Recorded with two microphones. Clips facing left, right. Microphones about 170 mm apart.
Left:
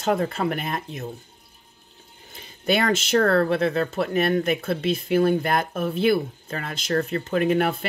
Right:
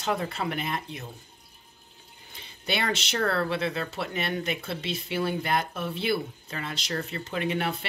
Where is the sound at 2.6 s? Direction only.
45° left (ahead or behind).